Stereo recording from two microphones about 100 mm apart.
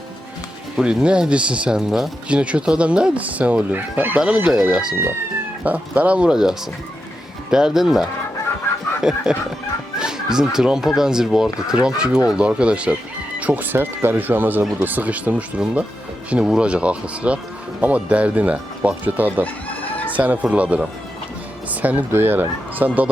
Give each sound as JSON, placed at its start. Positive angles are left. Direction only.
{"t": 0.8, "sound": "speech", "side_deg": -5}
{"t": 4.5, "sound": "speech", "side_deg": -5}
{"t": 10.0, "sound": "music", "side_deg": -5}
{"t": 10.5, "sound": "speech", "side_deg": -5}